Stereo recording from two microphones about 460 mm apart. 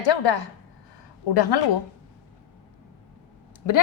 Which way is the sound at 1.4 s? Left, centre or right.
Left.